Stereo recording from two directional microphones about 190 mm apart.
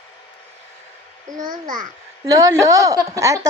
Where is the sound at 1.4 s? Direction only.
45° right (ahead or behind).